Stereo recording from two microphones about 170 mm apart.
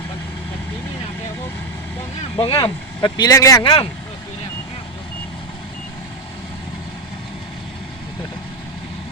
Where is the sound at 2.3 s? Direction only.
30° left (ahead or behind).